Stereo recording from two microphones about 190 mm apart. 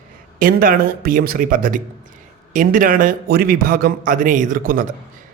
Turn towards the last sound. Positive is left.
turn(degrees=-45)  # may be behind; listen again after turning